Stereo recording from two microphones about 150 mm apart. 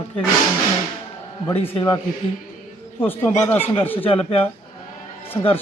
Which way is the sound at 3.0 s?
15° left (ahead or behind).